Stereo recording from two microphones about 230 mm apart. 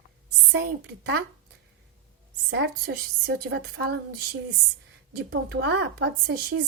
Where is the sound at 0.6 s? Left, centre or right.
Right.